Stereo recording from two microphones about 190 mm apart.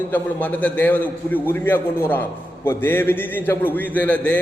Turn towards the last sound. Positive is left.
turn(degrees=10)  # may be behind; listen again after turning